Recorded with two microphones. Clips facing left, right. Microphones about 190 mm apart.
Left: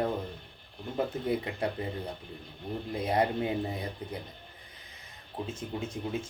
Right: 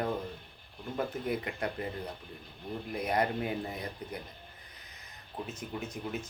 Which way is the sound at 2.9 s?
25° left (ahead or behind).